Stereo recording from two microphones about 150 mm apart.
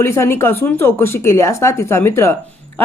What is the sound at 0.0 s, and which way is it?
Speech, 15° left (ahead or behind).